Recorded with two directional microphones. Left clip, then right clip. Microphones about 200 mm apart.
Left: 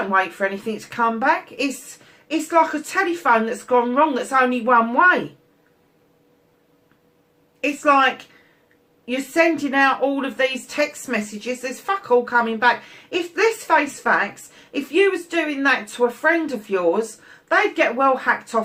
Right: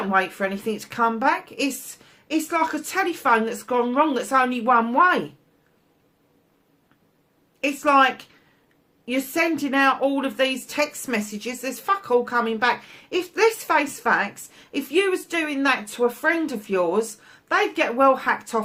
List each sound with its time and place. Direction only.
0.1 s speech: 45° right (ahead or behind)
7.6 s speech: 45° right (ahead or behind)
9.0 s speech: 45° right (ahead or behind)